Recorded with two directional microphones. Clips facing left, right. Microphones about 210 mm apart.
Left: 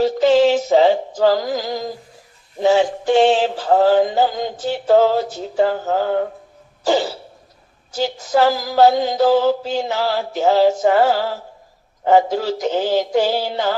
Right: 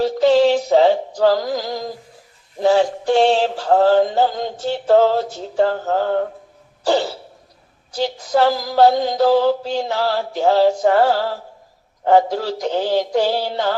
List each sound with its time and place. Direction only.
0.0 s mantra: centre (ahead or behind)
2.8 s synthetic singing: 20° left (ahead or behind)
3.3 s mantra: centre (ahead or behind)
7.9 s mantra: 5° left (ahead or behind)